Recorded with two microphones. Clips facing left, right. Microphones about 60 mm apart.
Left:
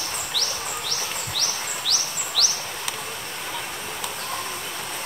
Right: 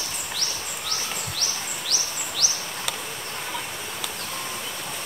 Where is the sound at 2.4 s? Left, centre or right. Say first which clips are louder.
Left 4 dB; left.